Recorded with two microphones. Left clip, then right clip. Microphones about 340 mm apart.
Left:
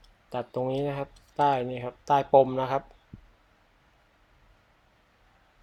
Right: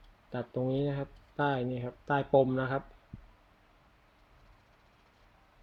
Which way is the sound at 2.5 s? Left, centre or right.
Centre.